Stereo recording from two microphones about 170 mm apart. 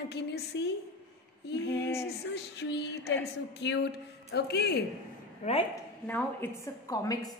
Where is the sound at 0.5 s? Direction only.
90° left.